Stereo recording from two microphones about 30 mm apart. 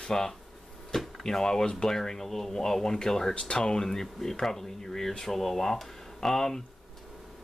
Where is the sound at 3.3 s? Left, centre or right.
Left; by 6.4 s centre.